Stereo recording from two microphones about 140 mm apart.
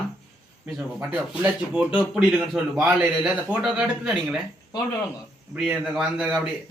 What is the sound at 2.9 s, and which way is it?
Speech, 15° right (ahead or behind).